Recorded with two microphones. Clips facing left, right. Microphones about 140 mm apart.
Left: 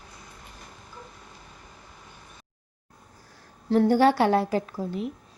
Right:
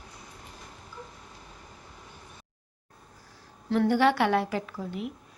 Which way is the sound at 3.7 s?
40° left (ahead or behind).